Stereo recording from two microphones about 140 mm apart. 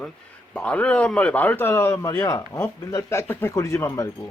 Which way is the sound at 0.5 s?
10° left (ahead or behind).